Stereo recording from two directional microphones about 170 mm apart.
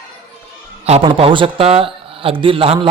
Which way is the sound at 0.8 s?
35° right (ahead or behind).